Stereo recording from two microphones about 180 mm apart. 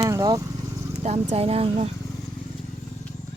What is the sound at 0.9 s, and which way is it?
Speech, 40° right (ahead or behind).